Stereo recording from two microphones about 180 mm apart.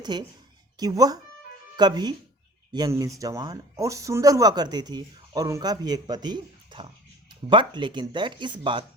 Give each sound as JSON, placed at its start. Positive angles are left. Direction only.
{"t": 0.0, "sound": "speech", "side_deg": -25}